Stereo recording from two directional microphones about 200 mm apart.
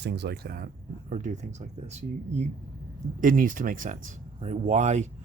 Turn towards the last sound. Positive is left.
turn(degrees=-35)  # may be behind; listen again after turning